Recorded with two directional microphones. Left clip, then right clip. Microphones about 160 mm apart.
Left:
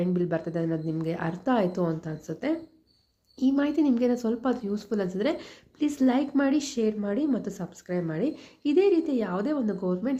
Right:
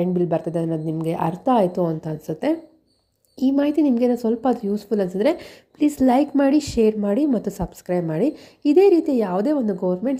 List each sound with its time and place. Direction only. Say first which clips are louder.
0.0 s a woman's voice: right 7 dB; 25° right (ahead or behind)
3.6 s a woman's voice: right 7 dB; 25° right (ahead or behind)